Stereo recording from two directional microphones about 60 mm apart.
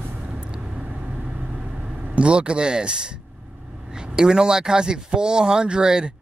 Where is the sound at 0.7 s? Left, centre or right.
Right.